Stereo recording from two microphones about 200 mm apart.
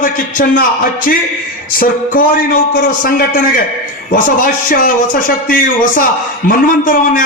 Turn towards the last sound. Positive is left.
turn(degrees=45)  # may be behind; listen again after turning